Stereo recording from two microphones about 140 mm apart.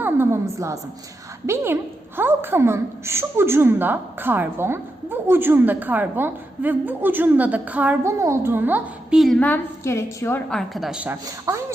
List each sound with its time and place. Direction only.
0.0 s a sound: 15° right (ahead or behind)
1.5 s a woman's voice: 15° right (ahead or behind)
9.4 s a woman's voice: 15° left (ahead or behind)
10.5 s a woman's voice: centre (ahead or behind)
11.5 s speech: 25° right (ahead or behind)